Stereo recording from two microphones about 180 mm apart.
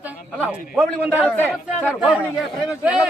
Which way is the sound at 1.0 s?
10° right (ahead or behind).